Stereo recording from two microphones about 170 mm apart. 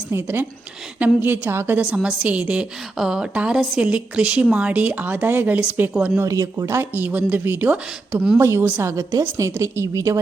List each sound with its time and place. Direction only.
0.1 s a woman's voice: 15° right (ahead or behind)
6.2 s a woman's voice: 20° right (ahead or behind)